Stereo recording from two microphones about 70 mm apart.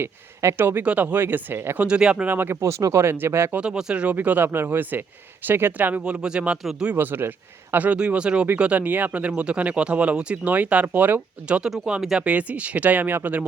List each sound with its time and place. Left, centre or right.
0.0 s speech: right
1.9 s speech: centre
2.6 s speech: right
3.6 s speech: centre
6.9 s speech: right
7.9 s speech: centre
11.6 s speech: centre; by 13.4 s right